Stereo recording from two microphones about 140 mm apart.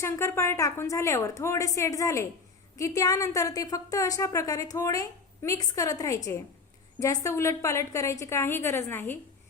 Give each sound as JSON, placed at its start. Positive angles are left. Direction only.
{"t": 0.0, "sound": "a woman's voice", "side_deg": 20}